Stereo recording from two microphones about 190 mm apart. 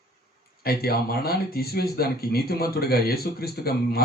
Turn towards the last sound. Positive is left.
turn(degrees=55)  # may be behind; listen again after turning